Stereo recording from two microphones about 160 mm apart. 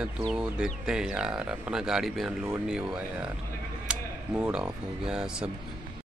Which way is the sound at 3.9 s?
10° right (ahead or behind).